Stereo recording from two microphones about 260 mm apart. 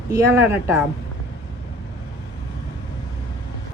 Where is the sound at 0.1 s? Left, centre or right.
Centre.